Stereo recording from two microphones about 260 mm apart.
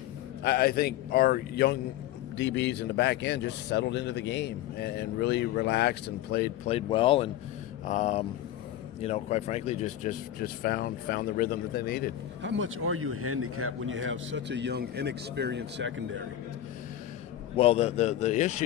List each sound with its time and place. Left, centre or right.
0.4 s a man's voice: left
6.7 s a man's voice: centre; by 12.1 s left
12.4 s speech: right
17.6 s a man's voice: left